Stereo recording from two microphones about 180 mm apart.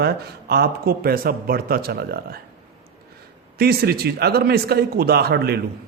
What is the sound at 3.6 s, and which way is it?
A man's voice, 60° right (ahead or behind).